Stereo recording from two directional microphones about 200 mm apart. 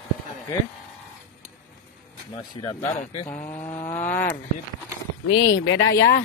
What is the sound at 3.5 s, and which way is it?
Speech, 10° left (ahead or behind).